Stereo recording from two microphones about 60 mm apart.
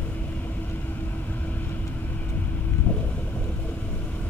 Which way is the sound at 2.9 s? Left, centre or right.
Left.